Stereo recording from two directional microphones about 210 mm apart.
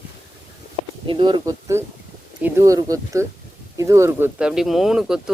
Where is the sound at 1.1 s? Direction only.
20° right (ahead or behind).